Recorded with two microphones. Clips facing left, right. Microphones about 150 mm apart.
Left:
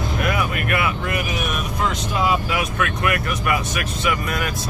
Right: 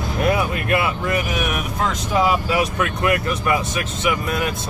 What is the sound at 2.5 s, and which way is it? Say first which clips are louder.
Speech: right 3 dB; 35° right (ahead or behind).